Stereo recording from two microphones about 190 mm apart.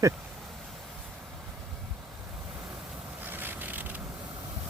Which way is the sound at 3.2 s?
10° right (ahead or behind).